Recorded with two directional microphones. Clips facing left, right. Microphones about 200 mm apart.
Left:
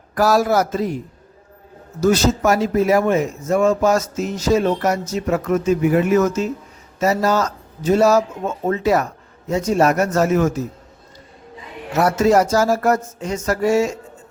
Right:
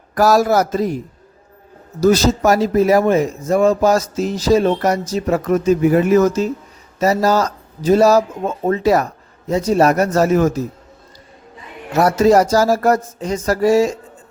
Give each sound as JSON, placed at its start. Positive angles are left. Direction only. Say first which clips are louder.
{"t": 0.1, "sound": "speech", "louder": "right 3 dB", "side_deg": -40}
{"t": 2.0, "sound": "speech", "louder": "right 3 dB", "side_deg": -35}
{"t": 11.9, "sound": "speech", "louder": "right 3 dB", "side_deg": -35}